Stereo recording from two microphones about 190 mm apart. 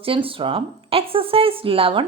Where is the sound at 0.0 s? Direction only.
30° right (ahead or behind).